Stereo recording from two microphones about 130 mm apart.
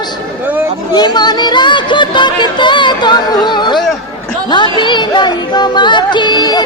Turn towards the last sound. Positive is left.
turn(degrees=35)  # may be behind; listen again after turning